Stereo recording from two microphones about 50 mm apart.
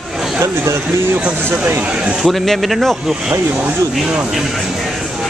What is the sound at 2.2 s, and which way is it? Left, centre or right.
Speech, centre.